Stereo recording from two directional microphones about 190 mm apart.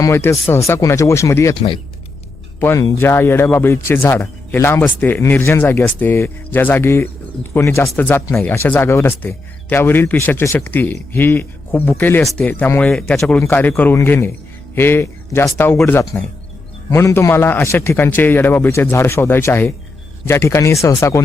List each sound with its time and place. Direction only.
0.0 s speech: 15° left (ahead or behind)
2.6 s speech: 15° left (ahead or behind)